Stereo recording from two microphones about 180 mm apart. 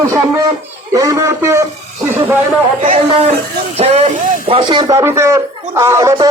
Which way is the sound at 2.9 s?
35° right (ahead or behind).